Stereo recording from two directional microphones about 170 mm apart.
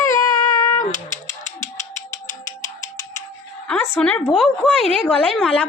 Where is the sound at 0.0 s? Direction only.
20° left (ahead or behind).